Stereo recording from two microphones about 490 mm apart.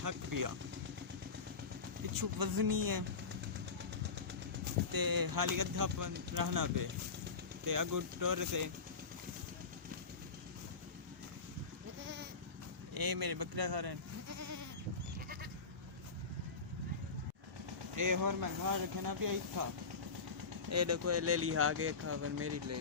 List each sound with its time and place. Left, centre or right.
0.0 s speech: right
2.1 s speech: right
4.9 s speech: right
12.9 s speech: right
14.3 s goat: right
17.9 s speech: right
20.7 s speech: right